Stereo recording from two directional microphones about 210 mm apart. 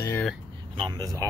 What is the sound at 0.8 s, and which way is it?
Speech, 20° right (ahead or behind).